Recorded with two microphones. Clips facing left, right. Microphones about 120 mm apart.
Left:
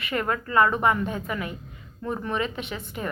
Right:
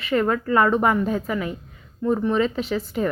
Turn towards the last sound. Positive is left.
turn(degrees=-35)  # may be behind; listen again after turning